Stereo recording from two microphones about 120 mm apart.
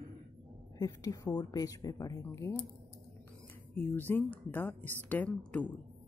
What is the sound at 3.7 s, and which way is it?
Speech, 15° left (ahead or behind).